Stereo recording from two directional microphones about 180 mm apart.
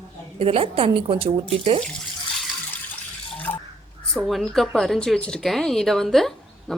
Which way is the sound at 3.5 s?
15° left (ahead or behind).